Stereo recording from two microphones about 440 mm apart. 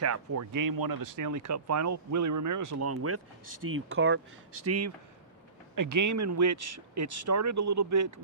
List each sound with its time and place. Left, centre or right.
0.0 s speech: right
5.7 s speech: right